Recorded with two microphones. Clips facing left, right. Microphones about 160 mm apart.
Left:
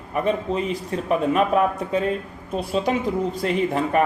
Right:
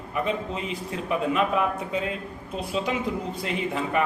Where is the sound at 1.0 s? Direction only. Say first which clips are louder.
Left 4 dB; 45° left (ahead or behind).